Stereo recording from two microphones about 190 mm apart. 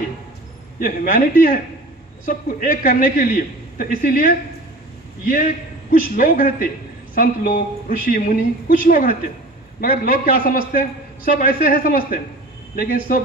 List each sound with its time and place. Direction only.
0.7 s a man's voice: 45° left (ahead or behind)